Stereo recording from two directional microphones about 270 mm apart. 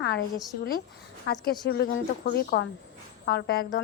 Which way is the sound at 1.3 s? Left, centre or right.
Left.